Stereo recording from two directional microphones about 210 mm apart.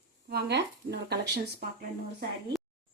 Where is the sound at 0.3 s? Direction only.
50° right (ahead or behind).